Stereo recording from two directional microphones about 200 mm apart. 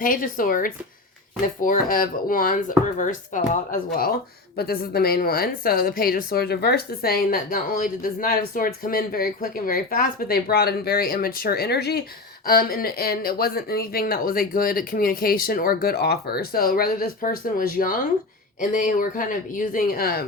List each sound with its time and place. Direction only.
0.0 s a woman's voice: 45° left (ahead or behind)